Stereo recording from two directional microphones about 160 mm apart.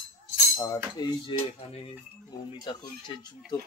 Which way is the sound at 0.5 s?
30° left (ahead or behind).